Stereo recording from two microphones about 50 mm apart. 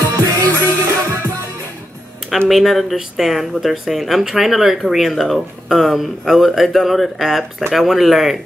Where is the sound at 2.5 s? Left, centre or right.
Centre.